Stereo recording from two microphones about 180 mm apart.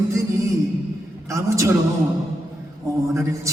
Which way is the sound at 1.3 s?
15° right (ahead or behind).